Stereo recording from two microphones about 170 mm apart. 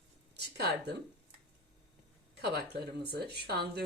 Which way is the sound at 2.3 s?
70° right (ahead or behind).